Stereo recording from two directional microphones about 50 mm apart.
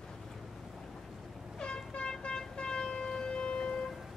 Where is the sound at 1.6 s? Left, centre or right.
Centre.